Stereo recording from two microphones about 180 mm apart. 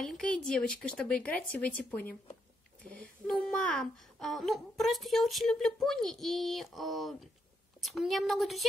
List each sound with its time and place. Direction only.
0.0 s speech: 5° left (ahead or behind)